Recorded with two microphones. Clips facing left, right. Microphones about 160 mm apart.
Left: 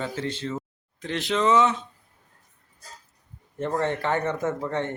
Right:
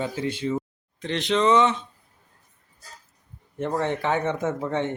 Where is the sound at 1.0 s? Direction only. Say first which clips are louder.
Right 2 dB; 5° left (ahead or behind).